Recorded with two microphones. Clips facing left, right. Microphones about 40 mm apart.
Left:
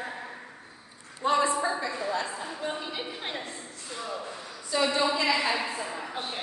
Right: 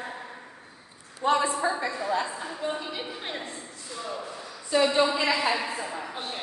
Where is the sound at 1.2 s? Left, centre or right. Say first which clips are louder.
Right 2 dB; centre.